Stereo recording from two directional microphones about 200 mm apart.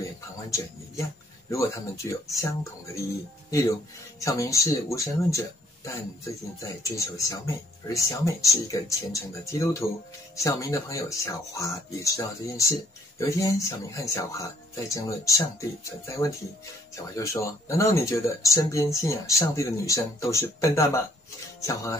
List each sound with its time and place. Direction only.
1.5 s speech: 15° left (ahead or behind)